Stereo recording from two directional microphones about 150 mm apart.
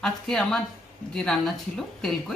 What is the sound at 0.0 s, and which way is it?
Speech, centre (ahead or behind).